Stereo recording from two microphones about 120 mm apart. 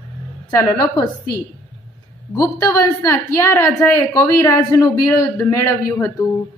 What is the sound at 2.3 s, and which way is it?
Speech, 25° left (ahead or behind).